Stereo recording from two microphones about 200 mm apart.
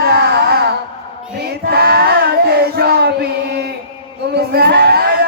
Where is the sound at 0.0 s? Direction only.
55° right (ahead or behind).